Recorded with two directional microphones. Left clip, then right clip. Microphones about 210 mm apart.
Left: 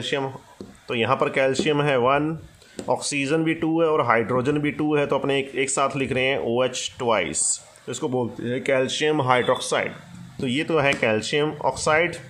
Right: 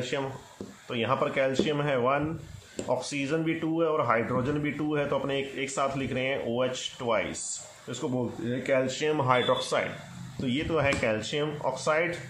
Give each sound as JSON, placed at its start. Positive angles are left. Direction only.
{"t": 0.0, "sound": "speech", "side_deg": 40}